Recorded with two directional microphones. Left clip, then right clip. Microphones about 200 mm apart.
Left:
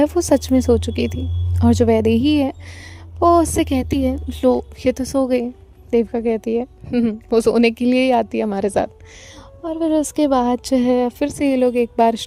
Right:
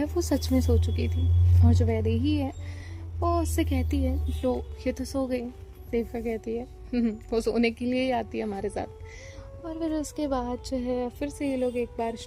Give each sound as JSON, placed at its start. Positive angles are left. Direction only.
{"t": 0.0, "sound": "a woman's voice", "side_deg": 50}